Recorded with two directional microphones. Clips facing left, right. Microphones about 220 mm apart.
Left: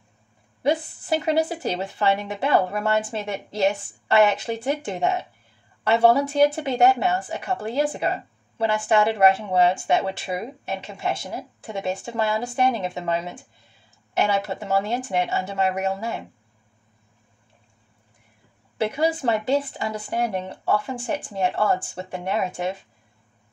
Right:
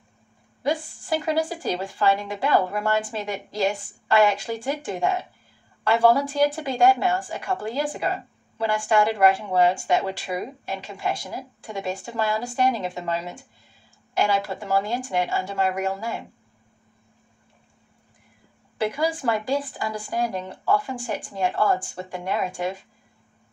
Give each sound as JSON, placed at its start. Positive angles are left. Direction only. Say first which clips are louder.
{"t": 0.6, "sound": "a woman's voice", "louder": "left 3 dB", "side_deg": 25}
{"t": 18.8, "sound": "a woman's voice", "louder": "left 2 dB", "side_deg": 25}